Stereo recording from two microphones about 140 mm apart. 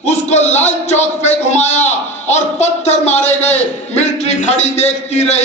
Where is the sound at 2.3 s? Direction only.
50° left (ahead or behind).